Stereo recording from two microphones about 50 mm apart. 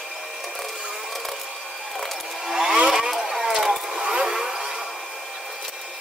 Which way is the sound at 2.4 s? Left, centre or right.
Centre.